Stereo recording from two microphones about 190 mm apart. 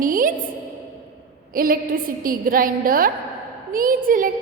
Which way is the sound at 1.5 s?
50° right (ahead or behind).